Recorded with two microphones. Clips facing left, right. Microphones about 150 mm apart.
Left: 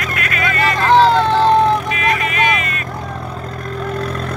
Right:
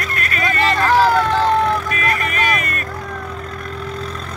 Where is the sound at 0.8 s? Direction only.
25° left (ahead or behind).